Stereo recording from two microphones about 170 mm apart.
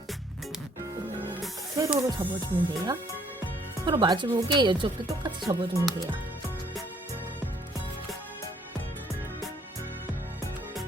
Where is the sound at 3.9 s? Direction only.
25° right (ahead or behind).